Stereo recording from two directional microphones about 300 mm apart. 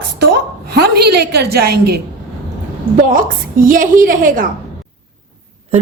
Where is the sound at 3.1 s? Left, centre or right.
Right.